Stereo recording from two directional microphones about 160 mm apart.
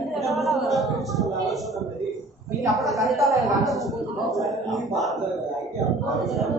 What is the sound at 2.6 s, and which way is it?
Speech, centre (ahead or behind).